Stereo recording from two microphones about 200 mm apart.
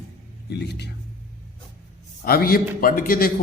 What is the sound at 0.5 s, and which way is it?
Speech, 55° left (ahead or behind).